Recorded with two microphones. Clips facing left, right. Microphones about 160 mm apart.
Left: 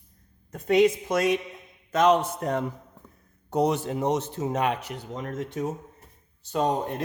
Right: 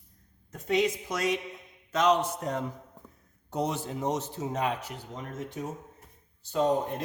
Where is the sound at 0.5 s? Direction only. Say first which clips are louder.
Left 7 dB; 55° left (ahead or behind).